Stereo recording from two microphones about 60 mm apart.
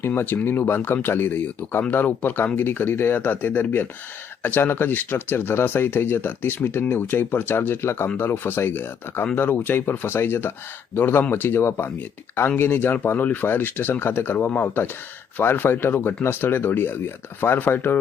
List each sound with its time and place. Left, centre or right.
0.0 s speech: left